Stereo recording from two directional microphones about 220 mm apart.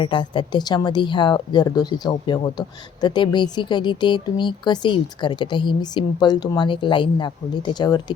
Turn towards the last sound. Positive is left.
turn(degrees=20)  # may be behind; listen again after turning